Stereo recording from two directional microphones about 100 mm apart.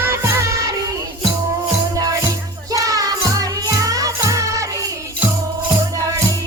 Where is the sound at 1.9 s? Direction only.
35° right (ahead or behind).